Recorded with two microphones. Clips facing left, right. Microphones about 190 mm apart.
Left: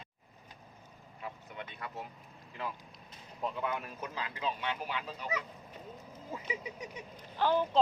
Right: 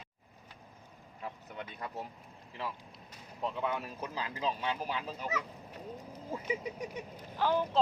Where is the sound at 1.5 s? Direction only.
40° right (ahead or behind).